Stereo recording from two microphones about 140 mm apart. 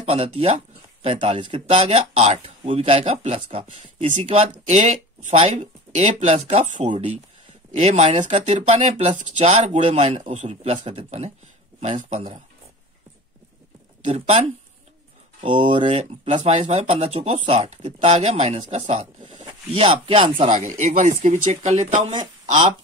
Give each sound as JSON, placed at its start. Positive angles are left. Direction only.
{"t": 0.0, "sound": "speech", "side_deg": -40}
{"t": 14.0, "sound": "speech", "side_deg": -45}
{"t": 15.4, "sound": "speech", "side_deg": -45}
{"t": 20.4, "sound": "speech", "side_deg": -60}